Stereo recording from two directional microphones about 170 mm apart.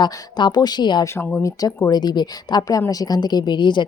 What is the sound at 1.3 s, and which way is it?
Speech, 15° left (ahead or behind).